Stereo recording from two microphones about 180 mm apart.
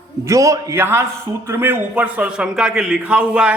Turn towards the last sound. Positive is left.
turn(degrees=-5)  # may be behind; listen again after turning